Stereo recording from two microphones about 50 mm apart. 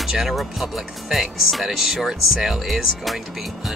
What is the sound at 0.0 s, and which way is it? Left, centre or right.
Speech, centre.